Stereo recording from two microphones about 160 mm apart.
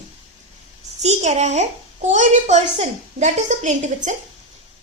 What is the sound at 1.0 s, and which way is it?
A woman's voice, 45° right (ahead or behind).